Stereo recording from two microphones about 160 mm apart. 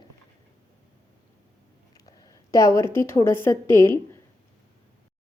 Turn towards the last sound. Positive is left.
turn(degrees=15)  # may be behind; listen again after turning